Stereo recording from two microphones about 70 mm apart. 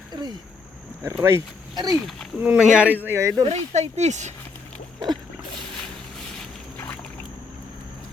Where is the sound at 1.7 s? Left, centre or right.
Right.